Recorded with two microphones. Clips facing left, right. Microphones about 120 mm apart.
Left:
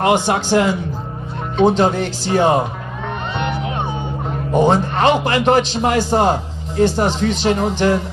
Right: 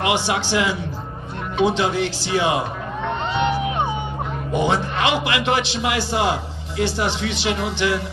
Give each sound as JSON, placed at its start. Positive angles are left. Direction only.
{"t": 0.0, "sound": "a man's voice", "side_deg": 45}
{"t": 1.8, "sound": "a man's voice", "side_deg": 45}
{"t": 4.5, "sound": "a man's voice", "side_deg": 45}